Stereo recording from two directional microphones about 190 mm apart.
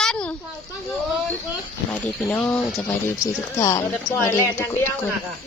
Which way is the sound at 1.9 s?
5° left (ahead or behind).